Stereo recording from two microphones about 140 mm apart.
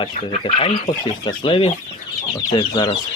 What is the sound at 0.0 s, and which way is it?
Speech, 40° left (ahead or behind).